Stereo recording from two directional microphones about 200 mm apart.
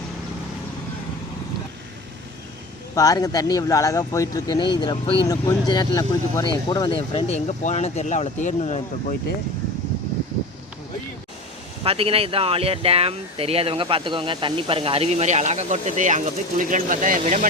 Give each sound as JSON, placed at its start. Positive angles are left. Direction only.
{"t": 2.9, "sound": "speech", "side_deg": 15}
{"t": 11.8, "sound": "speech", "side_deg": -30}